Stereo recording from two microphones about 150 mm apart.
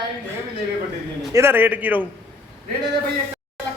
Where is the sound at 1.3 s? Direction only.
15° right (ahead or behind).